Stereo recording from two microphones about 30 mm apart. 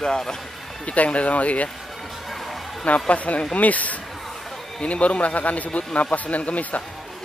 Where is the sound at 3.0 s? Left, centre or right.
Left.